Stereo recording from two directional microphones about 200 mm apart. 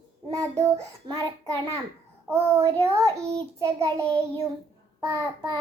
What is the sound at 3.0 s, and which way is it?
Speech, 15° right (ahead or behind).